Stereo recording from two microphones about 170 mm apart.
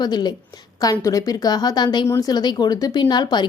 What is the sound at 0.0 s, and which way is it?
A woman's voice, 25° left (ahead or behind).